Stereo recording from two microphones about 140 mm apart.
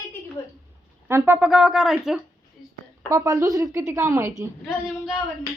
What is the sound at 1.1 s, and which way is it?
Speech, 15° right (ahead or behind).